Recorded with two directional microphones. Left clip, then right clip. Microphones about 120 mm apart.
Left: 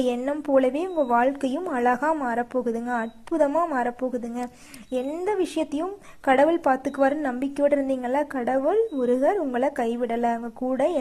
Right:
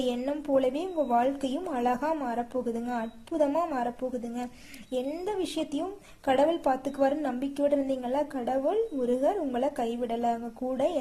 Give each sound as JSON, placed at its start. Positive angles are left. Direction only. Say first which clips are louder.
{"t": 0.0, "sound": "a woman's voice", "louder": "left 5 dB", "side_deg": 30}